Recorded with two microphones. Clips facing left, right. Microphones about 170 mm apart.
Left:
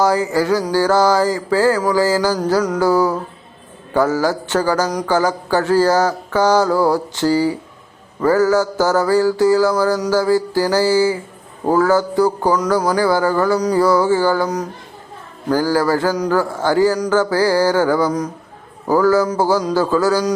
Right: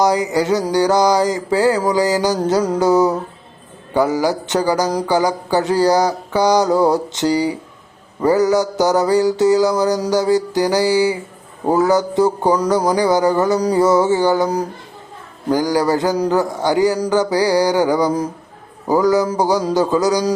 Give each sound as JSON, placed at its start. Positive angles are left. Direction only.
{"t": 0.0, "sound": "mantra", "side_deg": -20}
{"t": 1.8, "sound": "a sound", "side_deg": -20}
{"t": 3.9, "sound": "mantra", "side_deg": -15}
{"t": 11.7, "sound": "a sound", "side_deg": -20}
{"t": 15.4, "sound": "mantra", "side_deg": -15}
{"t": 16.1, "sound": "a man's voice", "side_deg": -30}
{"t": 16.4, "sound": "mantra", "side_deg": -15}